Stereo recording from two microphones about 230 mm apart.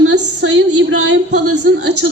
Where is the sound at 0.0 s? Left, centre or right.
Right.